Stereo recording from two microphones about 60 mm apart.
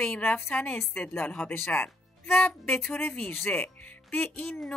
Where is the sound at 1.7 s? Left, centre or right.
Left.